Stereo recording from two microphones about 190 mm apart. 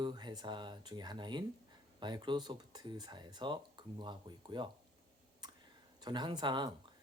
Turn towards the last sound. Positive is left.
turn(degrees=-25)  # may be behind; listen again after turning